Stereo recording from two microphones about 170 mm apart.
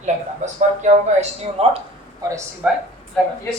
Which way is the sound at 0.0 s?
45° right (ahead or behind).